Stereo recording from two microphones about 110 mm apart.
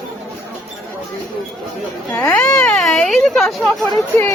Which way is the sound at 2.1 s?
15° left (ahead or behind).